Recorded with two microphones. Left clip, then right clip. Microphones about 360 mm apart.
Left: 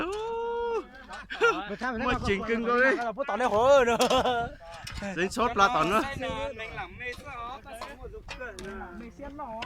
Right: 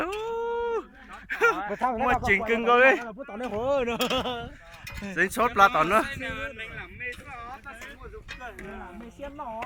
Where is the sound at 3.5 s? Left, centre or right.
Left.